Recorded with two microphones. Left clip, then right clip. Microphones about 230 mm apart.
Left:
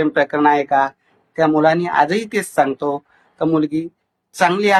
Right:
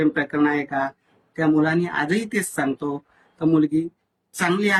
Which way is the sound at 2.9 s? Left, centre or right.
Right.